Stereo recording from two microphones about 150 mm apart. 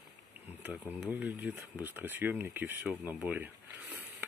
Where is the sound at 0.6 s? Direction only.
10° right (ahead or behind).